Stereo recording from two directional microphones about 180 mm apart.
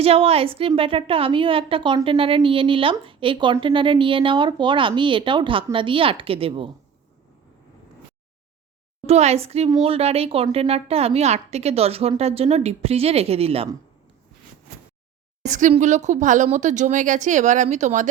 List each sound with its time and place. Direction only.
0.0 s a woman's voice: 35° right (ahead or behind)
9.0 s speech: 35° right (ahead or behind)
15.4 s speech: 40° right (ahead or behind)